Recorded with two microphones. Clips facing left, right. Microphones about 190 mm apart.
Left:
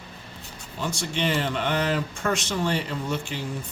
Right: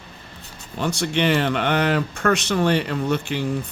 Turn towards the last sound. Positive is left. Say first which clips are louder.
# right 6 dB
turn(degrees=-65)  # may be behind; listen again after turning